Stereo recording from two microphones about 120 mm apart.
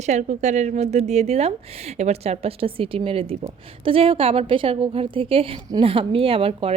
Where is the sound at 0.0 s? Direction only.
75° right (ahead or behind).